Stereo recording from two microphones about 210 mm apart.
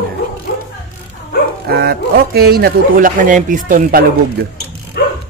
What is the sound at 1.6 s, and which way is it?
A man's voice, 50° right (ahead or behind).